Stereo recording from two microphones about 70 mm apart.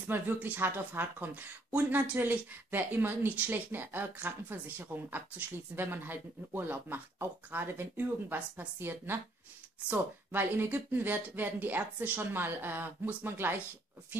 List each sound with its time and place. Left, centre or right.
0.1 s speech: right